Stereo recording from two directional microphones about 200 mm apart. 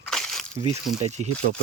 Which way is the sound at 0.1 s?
Centre (ahead or behind).